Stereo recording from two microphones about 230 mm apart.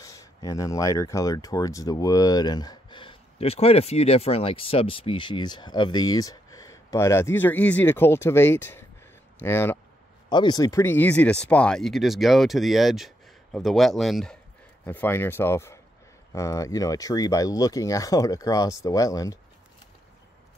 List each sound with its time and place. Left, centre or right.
0.0 s speech: centre